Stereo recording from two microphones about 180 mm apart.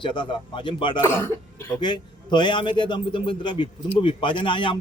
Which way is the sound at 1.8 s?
25° left (ahead or behind).